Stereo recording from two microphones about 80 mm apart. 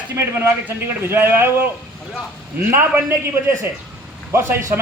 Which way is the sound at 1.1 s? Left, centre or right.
Right.